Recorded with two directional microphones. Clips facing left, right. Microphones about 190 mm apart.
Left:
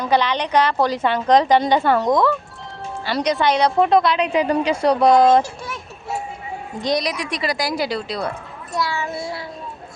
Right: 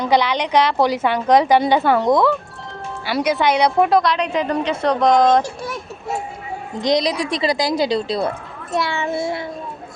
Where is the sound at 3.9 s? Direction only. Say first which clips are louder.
Left 1 dB; 5° left (ahead or behind).